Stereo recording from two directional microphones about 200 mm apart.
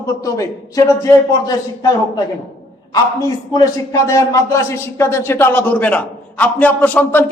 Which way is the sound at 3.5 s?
15° left (ahead or behind).